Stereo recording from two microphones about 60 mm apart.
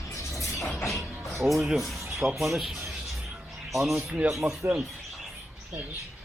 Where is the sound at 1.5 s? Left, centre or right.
Centre.